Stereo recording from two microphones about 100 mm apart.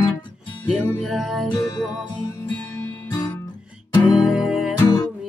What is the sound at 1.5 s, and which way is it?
Music, 45° left (ahead or behind).